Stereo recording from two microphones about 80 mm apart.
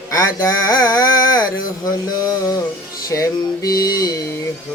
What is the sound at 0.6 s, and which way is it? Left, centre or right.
Carnatic music, left.